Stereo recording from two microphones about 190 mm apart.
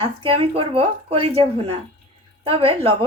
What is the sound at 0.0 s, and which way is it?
A woman's voice, 30° right (ahead or behind).